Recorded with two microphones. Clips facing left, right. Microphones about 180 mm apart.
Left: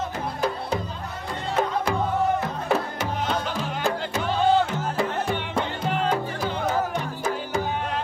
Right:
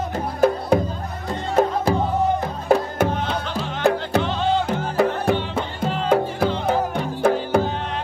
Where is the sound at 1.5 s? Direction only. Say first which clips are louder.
Right 6 dB; 35° right (ahead or behind).